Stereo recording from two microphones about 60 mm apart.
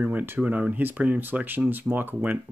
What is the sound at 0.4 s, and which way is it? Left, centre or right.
Speech, right.